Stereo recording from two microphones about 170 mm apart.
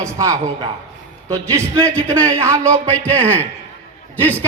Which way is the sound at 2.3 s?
15° right (ahead or behind).